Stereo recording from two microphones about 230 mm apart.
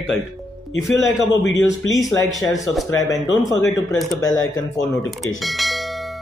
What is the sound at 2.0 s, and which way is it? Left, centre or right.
Speech, centre.